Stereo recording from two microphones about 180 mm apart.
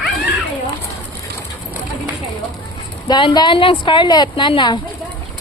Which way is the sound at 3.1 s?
25° left (ahead or behind).